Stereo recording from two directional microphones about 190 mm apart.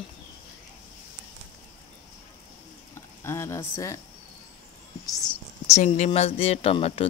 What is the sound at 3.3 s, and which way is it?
Speech, 15° left (ahead or behind).